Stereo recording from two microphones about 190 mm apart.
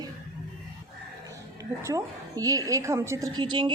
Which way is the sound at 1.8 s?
20° right (ahead or behind).